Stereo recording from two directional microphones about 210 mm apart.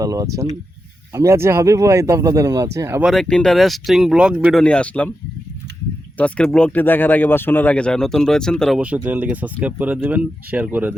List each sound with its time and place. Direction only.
0.0 s speech: 15° right (ahead or behind); by 5.1 s 5° left (ahead or behind)
6.1 s speech: 5° left (ahead or behind)